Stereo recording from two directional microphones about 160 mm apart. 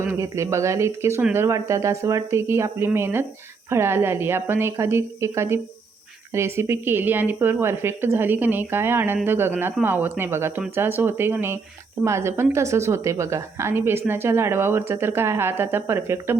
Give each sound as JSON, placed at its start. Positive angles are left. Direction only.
{"t": 0.0, "sound": "a woman's voice", "side_deg": -15}